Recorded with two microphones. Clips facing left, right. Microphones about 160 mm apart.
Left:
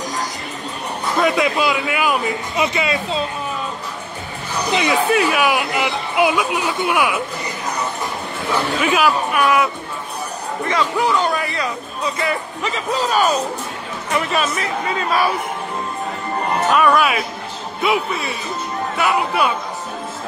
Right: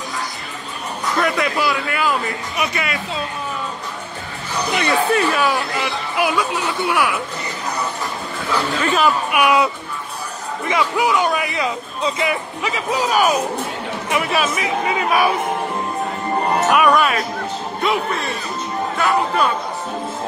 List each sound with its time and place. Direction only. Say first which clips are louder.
1.1 s speech: left 3 dB; 20° left (ahead or behind)
4.6 s speech: left 1 dB; 15° left (ahead or behind)
8.5 s speech: left 1 dB; 15° left (ahead or behind)
9.3 s speech: right 1 dB; 15° right (ahead or behind)
11.1 s speech: even; 15° right (ahead or behind)
16.9 s speech: even; 5° left (ahead or behind)